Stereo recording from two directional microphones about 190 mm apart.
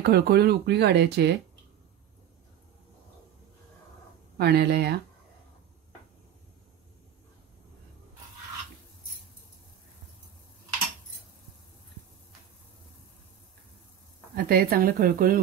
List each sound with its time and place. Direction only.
0.0 s speech: 55° right (ahead or behind)
4.4 s speech: 60° right (ahead or behind)
14.3 s speech: 55° right (ahead or behind)